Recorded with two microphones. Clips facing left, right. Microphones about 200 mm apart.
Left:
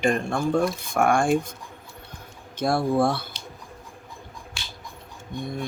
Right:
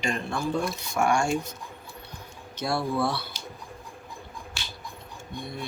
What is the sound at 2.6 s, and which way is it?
Speech, 50° left (ahead or behind).